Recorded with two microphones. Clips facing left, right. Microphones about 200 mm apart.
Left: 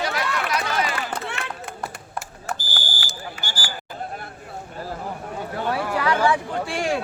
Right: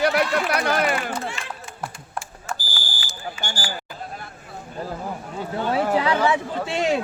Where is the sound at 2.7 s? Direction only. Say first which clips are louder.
Left 3 dB; 65° left (ahead or behind).